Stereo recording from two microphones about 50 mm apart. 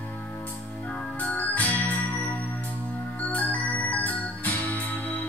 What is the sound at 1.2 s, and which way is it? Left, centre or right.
Music, left.